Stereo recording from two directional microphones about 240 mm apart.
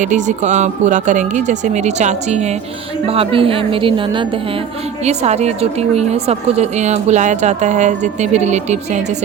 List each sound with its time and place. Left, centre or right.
0.0 s a woman's voice: right